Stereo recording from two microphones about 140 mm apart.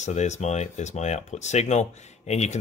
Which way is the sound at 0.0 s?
55° left (ahead or behind).